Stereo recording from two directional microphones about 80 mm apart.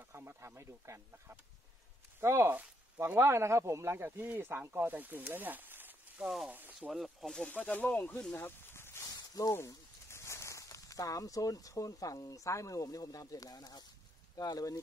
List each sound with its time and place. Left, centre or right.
0.0 s speech: right
6.2 s speech: centre
6.5 s speech: right
6.9 s speech: centre
7.4 s speech: left
8.4 s a sound: left
9.1 s a sound: left
10.0 s speech: left